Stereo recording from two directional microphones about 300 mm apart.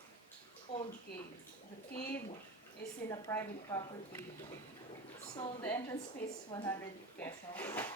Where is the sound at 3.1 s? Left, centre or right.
Centre.